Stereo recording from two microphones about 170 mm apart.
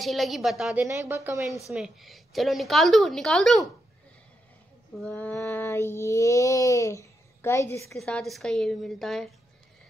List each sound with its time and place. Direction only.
0.0 s a woman's voice: centre (ahead or behind)
0.8 s a woman's voice: 15° right (ahead or behind)
1.7 s a woman's voice: centre (ahead or behind)
4.9 s child singing: 5° left (ahead or behind)
8.0 s a woman's voice: 5° left (ahead or behind)